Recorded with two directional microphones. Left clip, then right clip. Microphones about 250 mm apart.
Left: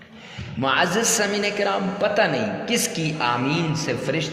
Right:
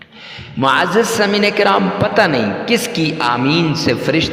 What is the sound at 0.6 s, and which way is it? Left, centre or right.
A man's voice, right.